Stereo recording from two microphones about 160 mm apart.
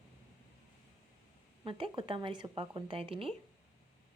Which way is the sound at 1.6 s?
35° right (ahead or behind).